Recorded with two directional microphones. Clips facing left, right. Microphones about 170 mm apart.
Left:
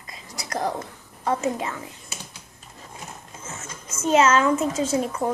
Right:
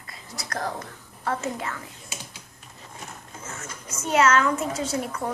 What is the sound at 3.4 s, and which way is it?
Speech, 20° left (ahead or behind).